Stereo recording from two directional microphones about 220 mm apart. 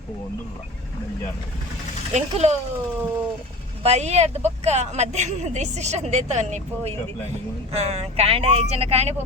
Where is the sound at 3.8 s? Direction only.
30° right (ahead or behind).